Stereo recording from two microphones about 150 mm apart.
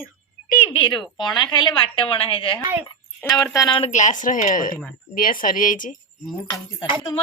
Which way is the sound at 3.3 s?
25° left (ahead or behind).